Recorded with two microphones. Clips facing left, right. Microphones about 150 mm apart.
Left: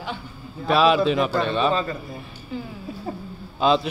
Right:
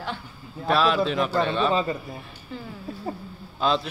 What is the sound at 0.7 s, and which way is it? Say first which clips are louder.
A woman's voice: left 4 dB; 10° left (ahead or behind).